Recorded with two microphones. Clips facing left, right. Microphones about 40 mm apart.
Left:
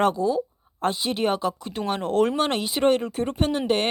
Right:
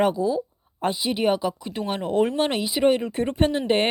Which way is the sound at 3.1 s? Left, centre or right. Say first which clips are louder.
Right 2 dB; right.